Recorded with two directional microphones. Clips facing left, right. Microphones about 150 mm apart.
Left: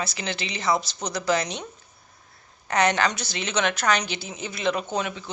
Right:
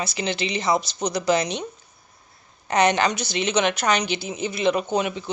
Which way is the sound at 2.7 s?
20° right (ahead or behind).